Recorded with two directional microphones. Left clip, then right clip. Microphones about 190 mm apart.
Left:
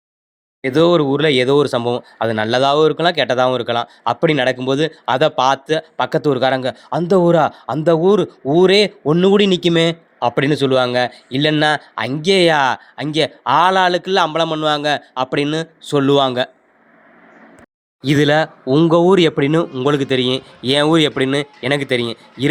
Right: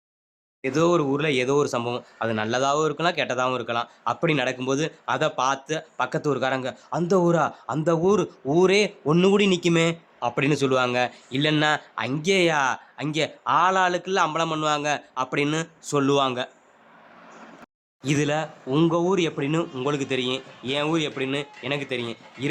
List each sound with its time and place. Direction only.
0.6 s speech: 25° left (ahead or behind)
18.0 s speech: 30° left (ahead or behind)